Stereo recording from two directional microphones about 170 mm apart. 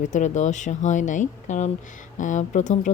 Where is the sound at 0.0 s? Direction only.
45° left (ahead or behind).